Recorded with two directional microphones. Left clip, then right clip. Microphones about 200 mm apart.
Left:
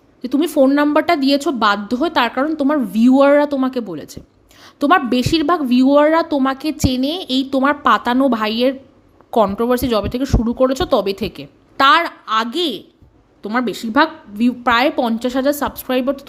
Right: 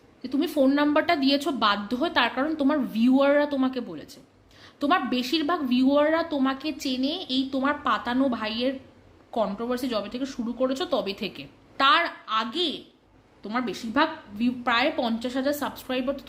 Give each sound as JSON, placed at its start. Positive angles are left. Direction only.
{"t": 0.2, "sound": "a woman's voice", "side_deg": 45}